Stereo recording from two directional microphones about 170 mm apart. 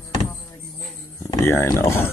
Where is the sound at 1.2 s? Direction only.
15° left (ahead or behind).